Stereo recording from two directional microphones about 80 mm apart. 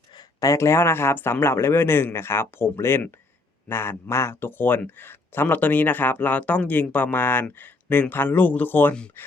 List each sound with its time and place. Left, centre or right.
0.3 s a man's voice: left